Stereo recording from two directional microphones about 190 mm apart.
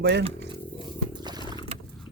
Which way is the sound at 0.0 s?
65° right (ahead or behind).